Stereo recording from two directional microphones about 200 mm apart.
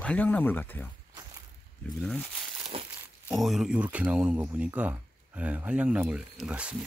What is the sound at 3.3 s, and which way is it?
Speech, centre (ahead or behind).